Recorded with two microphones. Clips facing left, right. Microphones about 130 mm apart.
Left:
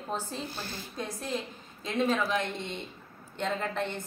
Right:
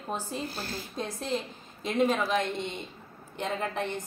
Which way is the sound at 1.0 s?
25° right (ahead or behind).